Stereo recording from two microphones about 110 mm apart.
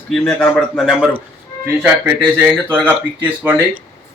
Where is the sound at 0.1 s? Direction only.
10° left (ahead or behind).